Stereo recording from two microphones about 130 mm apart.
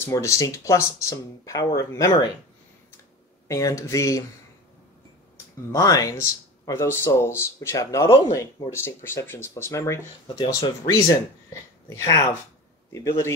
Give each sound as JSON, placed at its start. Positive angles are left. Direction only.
{"t": 0.0, "sound": "speech", "side_deg": 20}
{"t": 3.4, "sound": "speech", "side_deg": 25}
{"t": 5.7, "sound": "speech", "side_deg": 25}
{"t": 10.2, "sound": "speech", "side_deg": 35}